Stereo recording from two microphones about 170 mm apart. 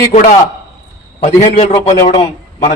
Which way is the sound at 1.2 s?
40° left (ahead or behind).